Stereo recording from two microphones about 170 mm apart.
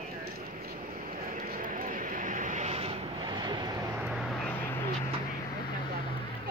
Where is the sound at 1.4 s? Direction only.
55° right (ahead or behind).